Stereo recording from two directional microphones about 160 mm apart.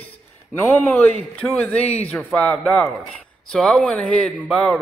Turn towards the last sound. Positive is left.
turn(degrees=10)  # may be behind; listen again after turning